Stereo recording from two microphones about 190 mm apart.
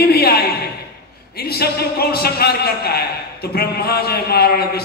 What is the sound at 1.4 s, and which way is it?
A man's voice, 55° left (ahead or behind).